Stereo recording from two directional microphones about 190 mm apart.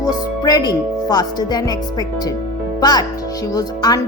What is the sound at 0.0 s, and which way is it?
Speech, 20° left (ahead or behind).